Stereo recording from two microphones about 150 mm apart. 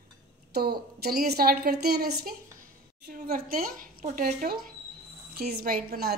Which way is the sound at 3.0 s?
75° right (ahead or behind).